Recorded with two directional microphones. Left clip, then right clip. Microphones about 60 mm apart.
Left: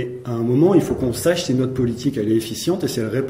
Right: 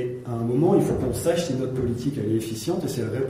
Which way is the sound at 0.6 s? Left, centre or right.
Left.